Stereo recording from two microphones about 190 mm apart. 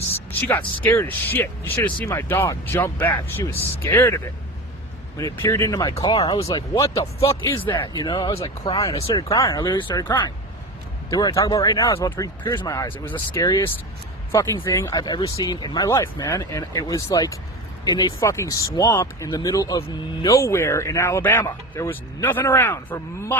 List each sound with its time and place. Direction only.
0.3 s speech: 10° left (ahead or behind); by 9.2 s 30° left (ahead or behind)
9.3 s speech: 20° left (ahead or behind)